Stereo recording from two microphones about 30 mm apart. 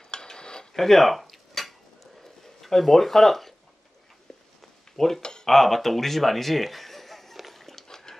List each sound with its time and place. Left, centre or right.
0.1 s cutlery: left
0.7 s cutlery: centre
2.4 s a sound: centre
2.8 s speech: centre
4.9 s speech: centre
5.2 s a sound: left
5.5 s a man's voice: centre
7.5 s dog: centre